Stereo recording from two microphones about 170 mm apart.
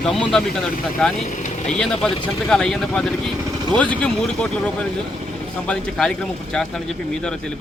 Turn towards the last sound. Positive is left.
turn(degrees=5)  # may be behind; listen again after turning